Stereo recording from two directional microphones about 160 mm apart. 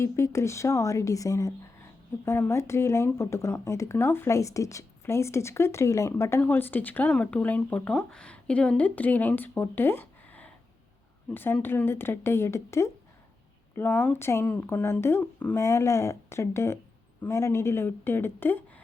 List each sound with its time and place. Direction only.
0.0 s speech: 15° left (ahead or behind)